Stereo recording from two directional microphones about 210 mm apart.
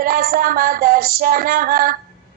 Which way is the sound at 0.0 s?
45° right (ahead or behind).